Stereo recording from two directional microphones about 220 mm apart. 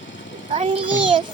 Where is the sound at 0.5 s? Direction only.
25° right (ahead or behind).